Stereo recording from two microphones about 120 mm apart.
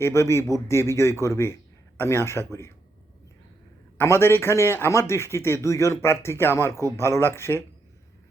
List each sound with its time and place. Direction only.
0.0 s a man's voice: 20° left (ahead or behind)
3.9 s a man's voice: 20° left (ahead or behind)